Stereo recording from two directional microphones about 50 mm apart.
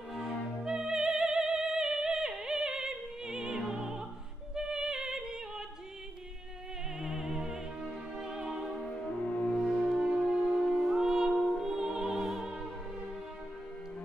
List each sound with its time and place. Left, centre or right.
0.1 s opera: centre
4.6 s music: centre
7.0 s music: centre
8.8 s music: centre
9.7 s music: centre